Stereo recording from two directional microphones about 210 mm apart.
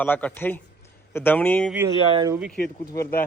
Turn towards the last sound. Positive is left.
turn(degrees=45)  # may be behind; listen again after turning